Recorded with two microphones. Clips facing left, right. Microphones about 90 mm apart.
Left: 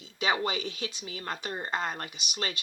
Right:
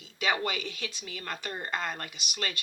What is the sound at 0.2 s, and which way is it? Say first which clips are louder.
Speech: left 1 dB; 25° left (ahead or behind).